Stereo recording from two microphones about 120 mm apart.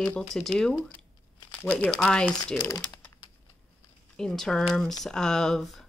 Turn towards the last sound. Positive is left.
turn(degrees=5)  # may be behind; listen again after turning